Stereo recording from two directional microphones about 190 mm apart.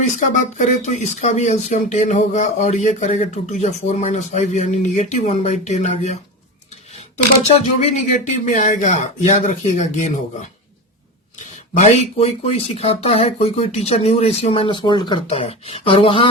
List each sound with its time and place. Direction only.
0.0 s speech: 40° left (ahead or behind)
8.1 s speech: 40° left (ahead or behind)
11.8 s speech: 35° left (ahead or behind)